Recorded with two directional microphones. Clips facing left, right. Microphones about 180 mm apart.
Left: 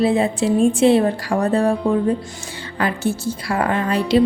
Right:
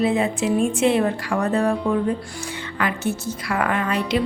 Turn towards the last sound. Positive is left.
turn(degrees=35)  # may be behind; listen again after turning